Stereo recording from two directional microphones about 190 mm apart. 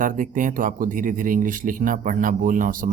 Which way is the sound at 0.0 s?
45° right (ahead or behind).